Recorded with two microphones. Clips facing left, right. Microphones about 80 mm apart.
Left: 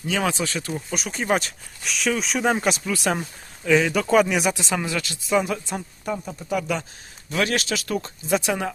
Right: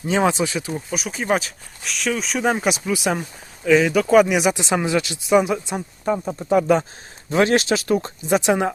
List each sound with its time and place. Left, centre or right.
0.0 s speech: right
3.2 s speech: centre; by 8.7 s right